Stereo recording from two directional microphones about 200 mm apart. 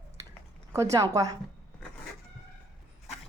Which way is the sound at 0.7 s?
15° right (ahead or behind).